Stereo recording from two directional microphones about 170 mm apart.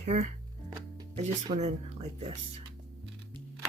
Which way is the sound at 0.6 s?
35° right (ahead or behind).